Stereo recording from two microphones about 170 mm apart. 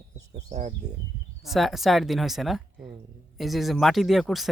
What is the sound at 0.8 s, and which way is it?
Speech, 45° right (ahead or behind).